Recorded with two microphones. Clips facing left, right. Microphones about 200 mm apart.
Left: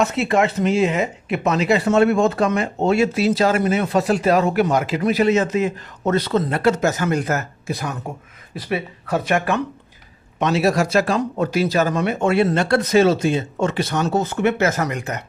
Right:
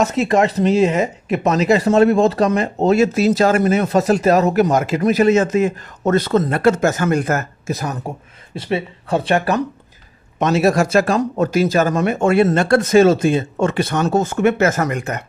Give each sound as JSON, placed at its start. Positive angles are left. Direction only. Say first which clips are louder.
{"t": 0.0, "sound": "speech", "louder": "right 3 dB", "side_deg": -40}
{"t": 8.5, "sound": "speech", "louder": "right 3 dB", "side_deg": -25}
{"t": 10.4, "sound": "speech", "louder": "right 3 dB", "side_deg": -45}